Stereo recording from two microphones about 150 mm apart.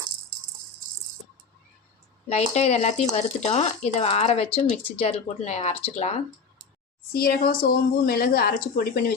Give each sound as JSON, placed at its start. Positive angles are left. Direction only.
{"t": 2.3, "sound": "speech", "side_deg": 45}
{"t": 7.1, "sound": "a woman's voice", "side_deg": 90}